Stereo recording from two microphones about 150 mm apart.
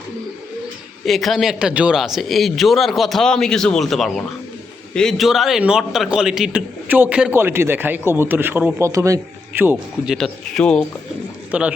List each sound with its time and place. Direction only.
1.0 s a man's voice: centre (ahead or behind); by 9.7 s 15° right (ahead or behind)
10.1 s a man's voice: centre (ahead or behind)
11.5 s a man's voice: 5° right (ahead or behind)